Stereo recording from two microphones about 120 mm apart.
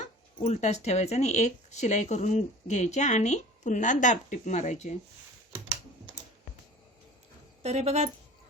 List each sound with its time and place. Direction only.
0.4 s speech: 75° left (ahead or behind)
7.6 s speech: 60° right (ahead or behind)